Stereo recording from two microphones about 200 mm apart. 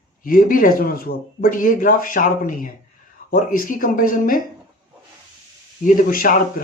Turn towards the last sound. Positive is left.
turn(degrees=45)  # may be behind; listen again after turning